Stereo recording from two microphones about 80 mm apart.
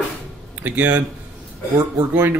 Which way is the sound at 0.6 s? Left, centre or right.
Right.